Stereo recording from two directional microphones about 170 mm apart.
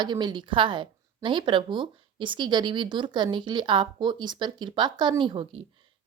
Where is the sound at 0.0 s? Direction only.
25° right (ahead or behind).